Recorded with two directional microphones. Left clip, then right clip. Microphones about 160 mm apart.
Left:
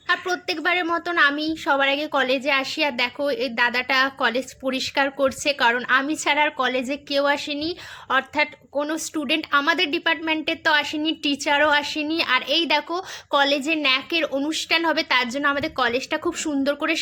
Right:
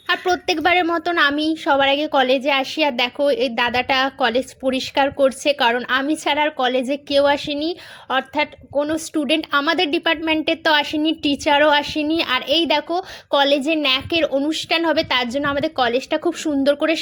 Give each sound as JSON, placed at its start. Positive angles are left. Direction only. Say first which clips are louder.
{"t": 0.1, "sound": "a woman's voice", "louder": "right 4 dB", "side_deg": -40}
{"t": 14.3, "sound": "a woman's voice", "louder": "right 3 dB", "side_deg": -15}